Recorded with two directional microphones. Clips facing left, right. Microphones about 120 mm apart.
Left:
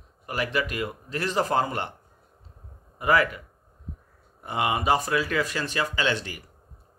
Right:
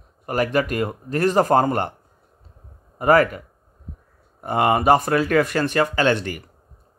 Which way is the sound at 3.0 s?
45° right (ahead or behind).